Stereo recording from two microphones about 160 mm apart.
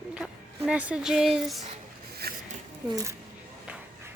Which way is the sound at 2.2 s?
75° right (ahead or behind).